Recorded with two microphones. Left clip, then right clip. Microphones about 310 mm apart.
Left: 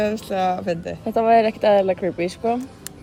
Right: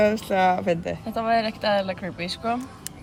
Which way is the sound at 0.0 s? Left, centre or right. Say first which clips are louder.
Right 2 dB; right.